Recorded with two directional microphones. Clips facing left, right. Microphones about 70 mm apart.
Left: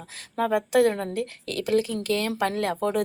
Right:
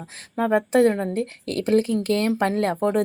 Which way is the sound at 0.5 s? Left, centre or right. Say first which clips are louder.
Right 3 dB; right.